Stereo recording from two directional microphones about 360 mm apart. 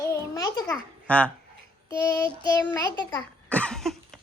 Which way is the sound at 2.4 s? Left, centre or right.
Centre.